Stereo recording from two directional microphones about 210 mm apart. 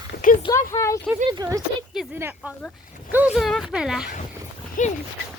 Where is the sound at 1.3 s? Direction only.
15° right (ahead or behind).